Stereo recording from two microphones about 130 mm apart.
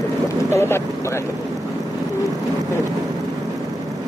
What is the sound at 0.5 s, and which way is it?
Speech, 20° left (ahead or behind).